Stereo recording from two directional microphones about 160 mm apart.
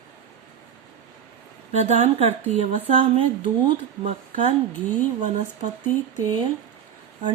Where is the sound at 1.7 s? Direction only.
45° right (ahead or behind).